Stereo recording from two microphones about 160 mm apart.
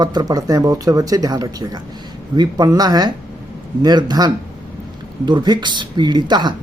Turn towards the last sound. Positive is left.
turn(degrees=-25)  # may be behind; listen again after turning